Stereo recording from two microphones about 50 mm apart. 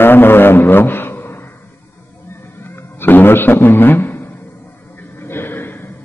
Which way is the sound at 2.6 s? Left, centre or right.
Left.